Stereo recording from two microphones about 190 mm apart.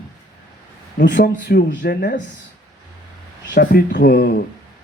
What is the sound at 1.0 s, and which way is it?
Speech, 65° left (ahead or behind).